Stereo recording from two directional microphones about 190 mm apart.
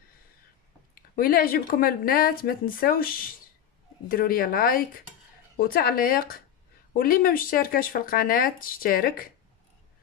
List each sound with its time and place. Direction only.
0.9 s speech: 50° left (ahead or behind)